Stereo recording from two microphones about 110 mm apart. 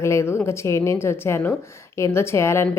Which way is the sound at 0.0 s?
25° left (ahead or behind).